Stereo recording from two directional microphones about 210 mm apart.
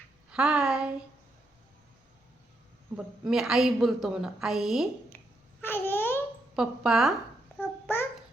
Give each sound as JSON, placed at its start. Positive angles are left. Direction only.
{"t": 0.3, "sound": "a woman's voice", "side_deg": -5}
{"t": 2.9, "sound": "a woman's voice", "side_deg": 0}
{"t": 5.0, "sound": "babbling", "side_deg": 10}
{"t": 6.6, "sound": "a woman's voice", "side_deg": 0}
{"t": 7.6, "sound": "babbling", "side_deg": 10}